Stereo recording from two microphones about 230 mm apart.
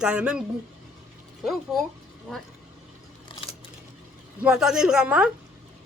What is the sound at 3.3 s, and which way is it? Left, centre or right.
Camera, left.